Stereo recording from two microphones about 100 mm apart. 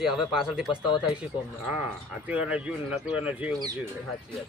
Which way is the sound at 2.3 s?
10° right (ahead or behind).